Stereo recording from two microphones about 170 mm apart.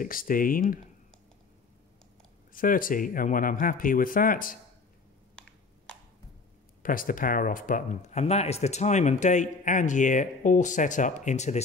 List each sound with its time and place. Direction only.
0.0 s speech: 55° left (ahead or behind)
2.5 s speech: 55° left (ahead or behind)
6.8 s speech: 55° left (ahead or behind)